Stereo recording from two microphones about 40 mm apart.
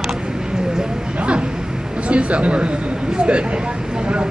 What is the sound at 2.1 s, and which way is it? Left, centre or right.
Speech, right.